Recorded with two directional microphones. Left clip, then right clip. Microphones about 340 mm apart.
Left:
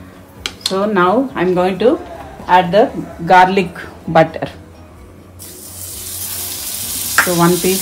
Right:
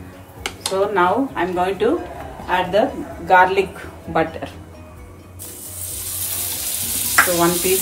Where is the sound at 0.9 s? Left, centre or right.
Left.